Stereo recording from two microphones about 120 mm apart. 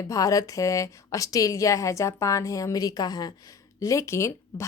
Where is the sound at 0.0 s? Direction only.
30° left (ahead or behind).